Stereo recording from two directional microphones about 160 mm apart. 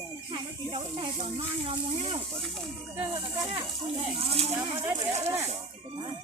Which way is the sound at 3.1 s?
30° right (ahead or behind).